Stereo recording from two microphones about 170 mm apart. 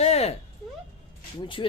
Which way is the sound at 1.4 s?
30° left (ahead or behind).